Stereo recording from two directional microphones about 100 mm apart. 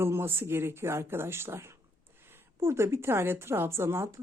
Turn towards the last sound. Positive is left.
turn(degrees=-25)  # may be behind; listen again after turning